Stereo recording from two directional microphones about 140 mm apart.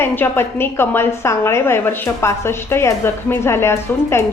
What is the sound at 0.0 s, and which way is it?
A woman's voice, 15° left (ahead or behind).